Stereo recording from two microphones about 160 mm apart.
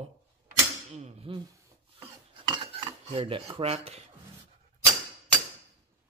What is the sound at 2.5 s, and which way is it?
Cutlery, 35° right (ahead or behind).